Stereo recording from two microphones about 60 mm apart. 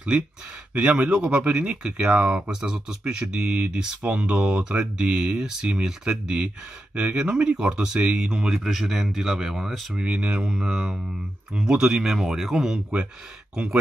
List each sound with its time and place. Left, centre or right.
0.7 s speech: right; by 9.8 s centre
9.9 s speech: centre